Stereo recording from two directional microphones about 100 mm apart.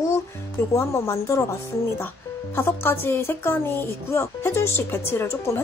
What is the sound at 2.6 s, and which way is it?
Speech, 25° left (ahead or behind).